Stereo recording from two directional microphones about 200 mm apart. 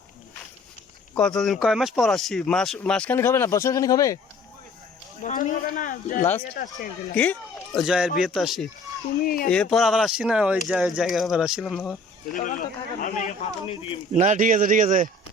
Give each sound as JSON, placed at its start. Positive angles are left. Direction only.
{"t": 1.1, "sound": "speech", "side_deg": 5}
{"t": 5.2, "sound": "speech", "side_deg": 40}
{"t": 7.2, "sound": "speech", "side_deg": 5}
{"t": 9.2, "sound": "speech", "side_deg": 45}
{"t": 9.5, "sound": "speech", "side_deg": 5}
{"t": 12.3, "sound": "speech", "side_deg": 40}
{"t": 14.2, "sound": "a man's voice", "side_deg": -40}